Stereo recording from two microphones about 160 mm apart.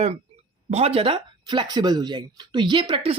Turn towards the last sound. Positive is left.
turn(degrees=-35)  # may be behind; listen again after turning